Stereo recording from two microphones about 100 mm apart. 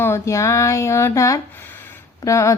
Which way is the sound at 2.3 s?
30° left (ahead or behind).